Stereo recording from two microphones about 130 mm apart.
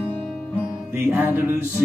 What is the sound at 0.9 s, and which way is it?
Music, 15° right (ahead or behind).